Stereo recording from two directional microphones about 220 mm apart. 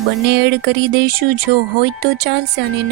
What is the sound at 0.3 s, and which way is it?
Speech, 50° right (ahead or behind).